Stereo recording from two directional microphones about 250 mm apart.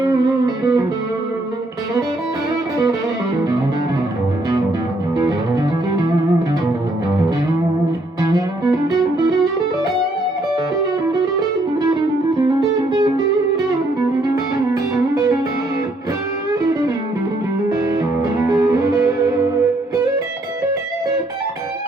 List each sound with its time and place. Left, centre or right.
0.0 s music: centre
8.3 s music: centre
12.9 s music: centre
14.7 s music: centre
17.7 s music: centre